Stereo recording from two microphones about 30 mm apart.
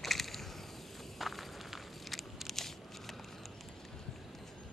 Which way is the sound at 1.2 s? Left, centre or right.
Centre.